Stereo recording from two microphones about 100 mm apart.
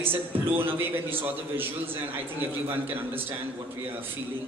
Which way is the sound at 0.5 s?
20° right (ahead or behind).